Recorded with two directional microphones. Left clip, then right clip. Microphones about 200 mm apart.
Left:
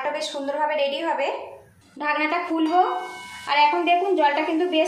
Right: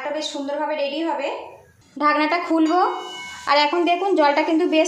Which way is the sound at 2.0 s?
35° right (ahead or behind).